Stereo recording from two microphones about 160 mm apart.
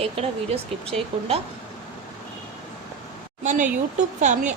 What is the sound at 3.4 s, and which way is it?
Speech, 50° right (ahead or behind).